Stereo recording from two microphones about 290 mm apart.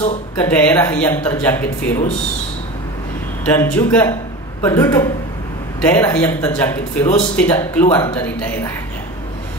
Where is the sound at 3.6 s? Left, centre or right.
Centre.